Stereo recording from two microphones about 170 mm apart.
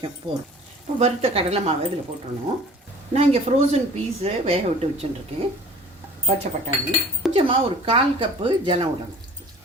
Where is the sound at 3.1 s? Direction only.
40° right (ahead or behind).